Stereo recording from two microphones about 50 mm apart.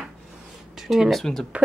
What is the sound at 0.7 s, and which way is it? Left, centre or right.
Speech, centre.